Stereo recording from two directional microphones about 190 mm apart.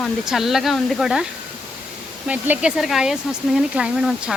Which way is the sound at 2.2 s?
10° right (ahead or behind).